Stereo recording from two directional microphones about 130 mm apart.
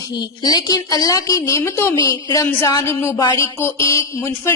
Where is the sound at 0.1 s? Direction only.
30° left (ahead or behind).